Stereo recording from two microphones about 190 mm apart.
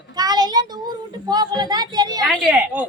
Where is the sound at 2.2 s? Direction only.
Centre (ahead or behind).